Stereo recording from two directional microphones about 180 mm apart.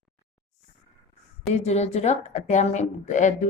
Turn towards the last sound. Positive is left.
turn(degrees=40)  # may be behind; listen again after turning